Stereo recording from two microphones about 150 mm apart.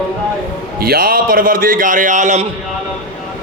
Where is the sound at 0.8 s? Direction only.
85° right; by 2.4 s 55° right (ahead or behind).